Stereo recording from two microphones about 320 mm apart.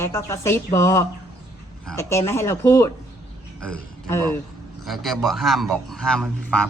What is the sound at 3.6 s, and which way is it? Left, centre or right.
Speech, right.